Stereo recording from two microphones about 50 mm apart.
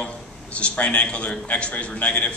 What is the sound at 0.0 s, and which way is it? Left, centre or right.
A man's voice, left.